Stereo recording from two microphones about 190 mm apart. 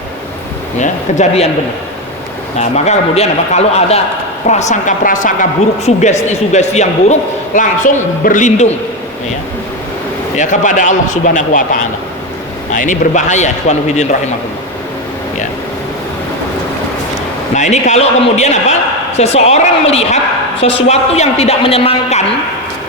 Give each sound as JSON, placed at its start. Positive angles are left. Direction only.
{"t": 0.8, "sound": "speech", "side_deg": 40}
{"t": 2.6, "sound": "speech", "side_deg": 35}
{"t": 10.3, "sound": "speech", "side_deg": 40}
{"t": 17.5, "sound": "speech", "side_deg": 40}